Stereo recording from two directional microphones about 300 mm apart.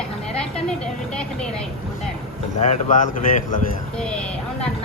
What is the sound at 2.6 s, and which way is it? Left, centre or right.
Speech, left.